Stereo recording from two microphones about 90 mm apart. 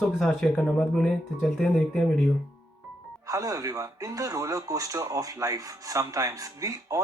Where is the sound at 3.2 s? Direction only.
40° right (ahead or behind).